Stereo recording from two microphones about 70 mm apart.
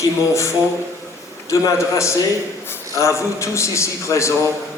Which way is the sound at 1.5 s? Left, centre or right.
Left.